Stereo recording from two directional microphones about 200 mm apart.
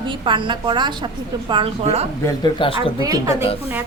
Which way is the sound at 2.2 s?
20° left (ahead or behind).